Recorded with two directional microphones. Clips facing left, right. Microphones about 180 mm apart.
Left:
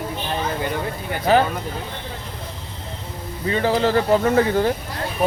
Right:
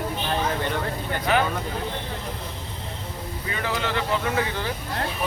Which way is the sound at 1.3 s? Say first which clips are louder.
Left 6 dB; 35° left (ahead or behind).